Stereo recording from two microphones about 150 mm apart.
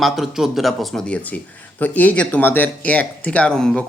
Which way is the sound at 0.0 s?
Centre (ahead or behind).